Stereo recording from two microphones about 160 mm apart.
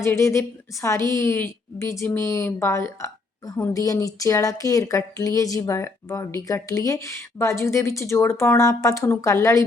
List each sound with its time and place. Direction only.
0.0 s a woman's voice: 20° left (ahead or behind)